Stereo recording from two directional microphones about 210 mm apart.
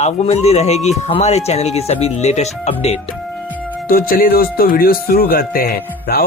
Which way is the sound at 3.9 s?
45° left (ahead or behind).